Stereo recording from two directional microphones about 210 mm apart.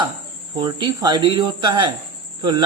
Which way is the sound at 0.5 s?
25° right (ahead or behind).